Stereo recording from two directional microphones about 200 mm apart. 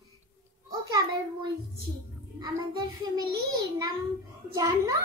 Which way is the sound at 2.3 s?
20° right (ahead or behind).